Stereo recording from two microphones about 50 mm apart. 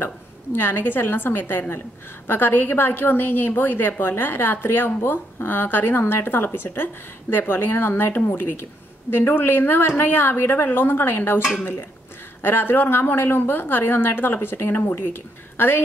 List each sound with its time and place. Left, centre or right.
0.0 s a woman's voice: left
8.1 s a woman's voice: left